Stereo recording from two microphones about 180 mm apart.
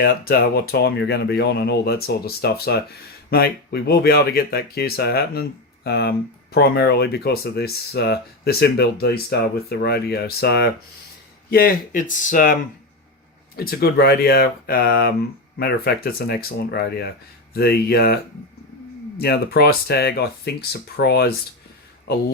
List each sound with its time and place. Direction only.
0.0 s speech: 60° left (ahead or behind)
13.6 s speech: 60° left (ahead or behind)